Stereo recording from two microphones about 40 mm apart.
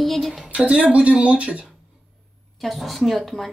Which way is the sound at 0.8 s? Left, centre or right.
Right.